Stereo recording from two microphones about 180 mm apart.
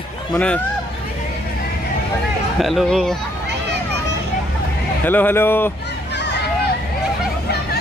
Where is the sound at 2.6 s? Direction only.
Centre (ahead or behind).